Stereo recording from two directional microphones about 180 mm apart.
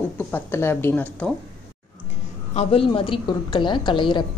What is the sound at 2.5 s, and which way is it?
A woman's voice, 30° left (ahead or behind).